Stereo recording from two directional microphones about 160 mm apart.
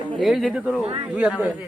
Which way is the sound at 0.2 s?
Centre (ahead or behind).